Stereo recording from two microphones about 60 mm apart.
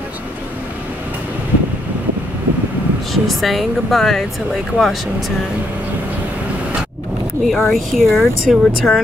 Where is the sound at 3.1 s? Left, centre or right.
Centre.